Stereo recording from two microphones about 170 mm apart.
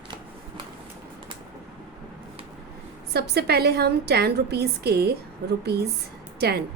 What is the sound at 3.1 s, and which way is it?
A woman's voice, 70° right (ahead or behind).